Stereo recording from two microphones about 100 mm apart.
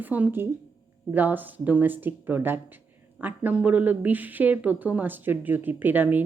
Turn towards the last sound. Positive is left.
turn(degrees=-20)  # may be behind; listen again after turning